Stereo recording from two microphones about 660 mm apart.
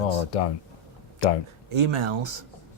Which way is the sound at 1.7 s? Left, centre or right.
Right.